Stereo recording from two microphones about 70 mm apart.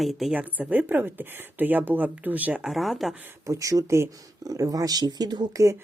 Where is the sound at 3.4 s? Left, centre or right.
Right.